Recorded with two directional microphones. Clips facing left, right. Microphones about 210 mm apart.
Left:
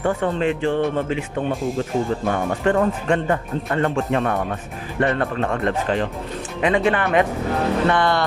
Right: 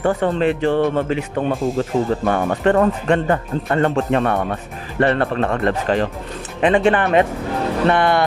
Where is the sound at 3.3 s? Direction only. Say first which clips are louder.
Right 3 dB; 40° right (ahead or behind).